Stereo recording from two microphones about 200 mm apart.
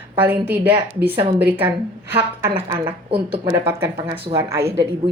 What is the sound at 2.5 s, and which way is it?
A woman's voice, 25° right (ahead or behind).